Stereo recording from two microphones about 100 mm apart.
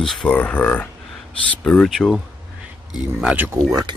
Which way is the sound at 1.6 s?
5° left (ahead or behind).